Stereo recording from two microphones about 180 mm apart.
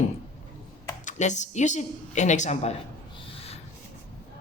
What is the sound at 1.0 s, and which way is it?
Speech, 40° left (ahead or behind).